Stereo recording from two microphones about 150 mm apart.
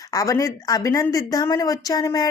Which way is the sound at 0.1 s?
20° left (ahead or behind).